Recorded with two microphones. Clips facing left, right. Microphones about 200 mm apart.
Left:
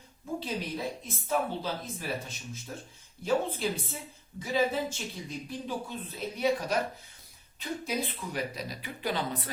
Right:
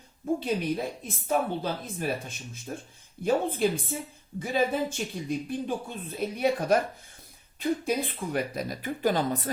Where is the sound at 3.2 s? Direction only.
55° right (ahead or behind).